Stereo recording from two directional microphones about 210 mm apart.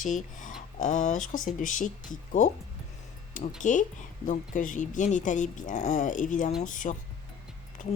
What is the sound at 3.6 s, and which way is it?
Speech, 35° left (ahead or behind).